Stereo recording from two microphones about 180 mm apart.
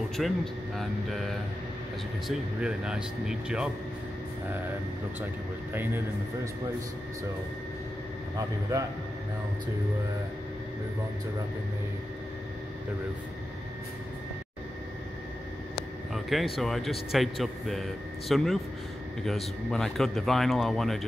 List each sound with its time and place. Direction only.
0.2 s speech: centre (ahead or behind)
5.7 s a man's voice: 10° right (ahead or behind)
8.4 s a man's voice: 20° right (ahead or behind)
16.5 s speech: centre (ahead or behind)